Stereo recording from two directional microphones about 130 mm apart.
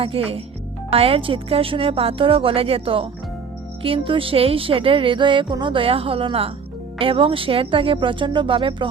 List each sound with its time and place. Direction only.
0.0 s speech: 45° right (ahead or behind)